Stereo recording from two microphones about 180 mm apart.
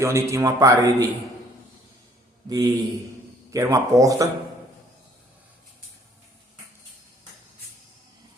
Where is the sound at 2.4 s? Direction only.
20° right (ahead or behind).